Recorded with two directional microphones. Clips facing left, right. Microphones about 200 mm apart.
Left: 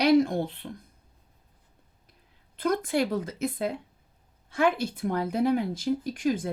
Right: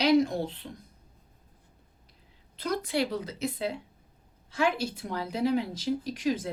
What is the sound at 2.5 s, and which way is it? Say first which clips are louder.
Speech: left 4 dB; 50° left (ahead or behind).